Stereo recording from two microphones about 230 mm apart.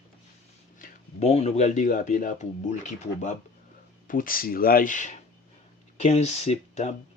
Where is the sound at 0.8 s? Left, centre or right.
Left.